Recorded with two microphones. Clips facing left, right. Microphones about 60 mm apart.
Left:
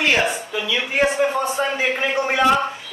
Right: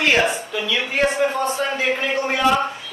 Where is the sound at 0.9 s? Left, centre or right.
Centre.